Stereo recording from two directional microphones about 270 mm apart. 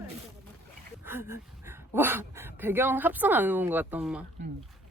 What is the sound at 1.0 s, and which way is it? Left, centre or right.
Speech, centre.